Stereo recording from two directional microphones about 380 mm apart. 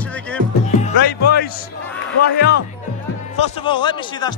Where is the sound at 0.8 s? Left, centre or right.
Left.